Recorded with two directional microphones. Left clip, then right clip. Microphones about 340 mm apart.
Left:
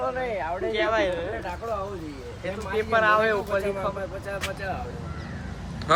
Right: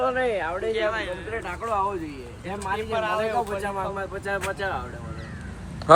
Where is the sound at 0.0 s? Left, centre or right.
Right.